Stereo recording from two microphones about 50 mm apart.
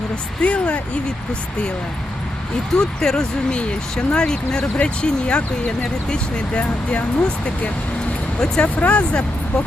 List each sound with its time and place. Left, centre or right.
0.4 s speech: left
2.7 s speech: centre
8.7 s speech: left